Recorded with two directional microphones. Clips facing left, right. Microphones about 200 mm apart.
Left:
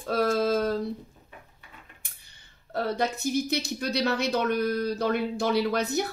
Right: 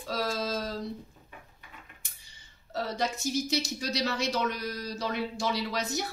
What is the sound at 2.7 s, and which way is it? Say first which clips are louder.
A woman's voice: left 4 dB; 55° left (ahead or behind).